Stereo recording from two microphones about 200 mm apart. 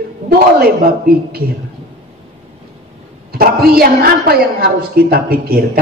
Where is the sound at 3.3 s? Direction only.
50° right (ahead or behind).